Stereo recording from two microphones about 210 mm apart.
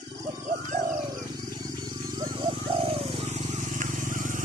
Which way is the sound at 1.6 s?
20° right (ahead or behind).